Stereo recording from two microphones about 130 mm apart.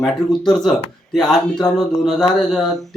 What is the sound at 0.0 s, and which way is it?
Speech, 5° left (ahead or behind).